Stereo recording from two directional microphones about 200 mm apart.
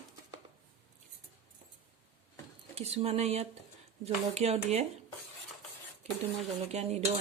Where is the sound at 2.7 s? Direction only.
30° right (ahead or behind).